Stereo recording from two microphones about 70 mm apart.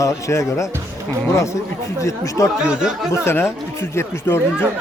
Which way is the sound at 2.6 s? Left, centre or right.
Centre.